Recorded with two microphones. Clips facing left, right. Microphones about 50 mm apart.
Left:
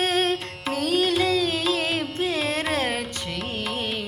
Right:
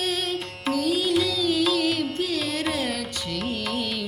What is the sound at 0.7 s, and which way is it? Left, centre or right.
Music, left.